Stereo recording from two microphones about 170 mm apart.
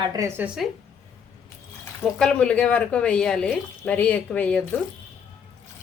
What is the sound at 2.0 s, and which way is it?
A woman's voice, 5° left (ahead or behind).